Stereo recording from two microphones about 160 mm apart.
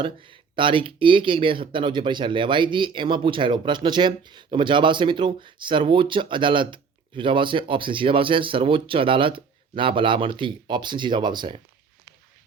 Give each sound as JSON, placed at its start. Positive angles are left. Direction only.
{"t": 0.0, "sound": "speech", "side_deg": -30}